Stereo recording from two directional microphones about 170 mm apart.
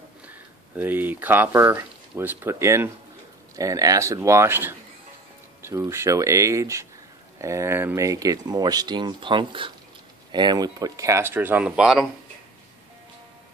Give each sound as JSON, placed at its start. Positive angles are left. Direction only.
{"t": 0.2, "sound": "speech", "side_deg": -10}